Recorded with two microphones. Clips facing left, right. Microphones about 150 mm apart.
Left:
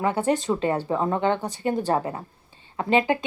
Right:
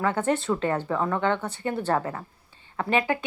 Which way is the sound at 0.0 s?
15° left (ahead or behind).